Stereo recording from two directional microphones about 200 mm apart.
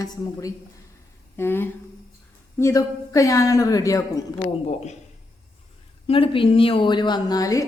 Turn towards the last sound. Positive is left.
turn(degrees=15)  # may be behind; listen again after turning